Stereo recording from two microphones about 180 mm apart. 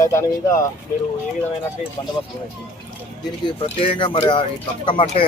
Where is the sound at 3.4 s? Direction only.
30° left (ahead or behind).